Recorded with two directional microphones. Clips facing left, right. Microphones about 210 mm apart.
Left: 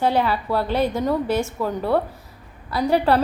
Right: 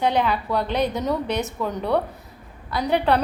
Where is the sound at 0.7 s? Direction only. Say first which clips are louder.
Left 2 dB; 20° right (ahead or behind).